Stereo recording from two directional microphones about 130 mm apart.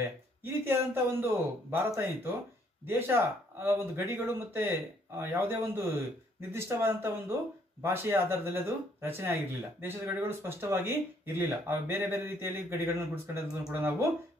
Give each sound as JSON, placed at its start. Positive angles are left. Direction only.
{"t": 0.0, "sound": "speech", "side_deg": -20}
{"t": 2.9, "sound": "speech", "side_deg": -20}